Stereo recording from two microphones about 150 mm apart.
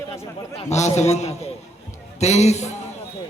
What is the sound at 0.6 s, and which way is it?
A man's voice, 50° left (ahead or behind).